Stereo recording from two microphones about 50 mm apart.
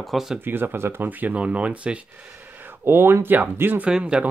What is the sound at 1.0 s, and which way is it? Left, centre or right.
Speech, right.